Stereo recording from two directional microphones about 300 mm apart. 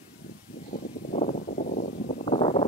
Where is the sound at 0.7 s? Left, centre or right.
Left.